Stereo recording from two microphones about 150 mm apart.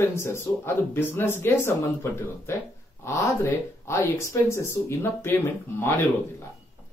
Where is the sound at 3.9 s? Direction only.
20° left (ahead or behind).